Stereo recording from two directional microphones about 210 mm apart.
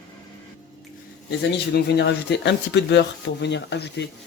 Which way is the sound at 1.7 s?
55° left (ahead or behind).